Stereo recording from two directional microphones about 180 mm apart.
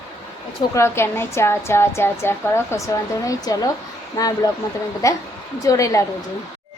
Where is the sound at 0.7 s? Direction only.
15° left (ahead or behind).